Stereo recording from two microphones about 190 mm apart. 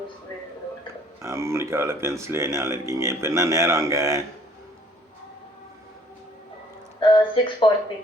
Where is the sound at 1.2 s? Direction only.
15° right (ahead or behind).